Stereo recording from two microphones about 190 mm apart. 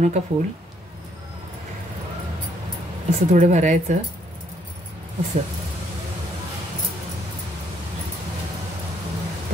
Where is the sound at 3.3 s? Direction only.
40° right (ahead or behind).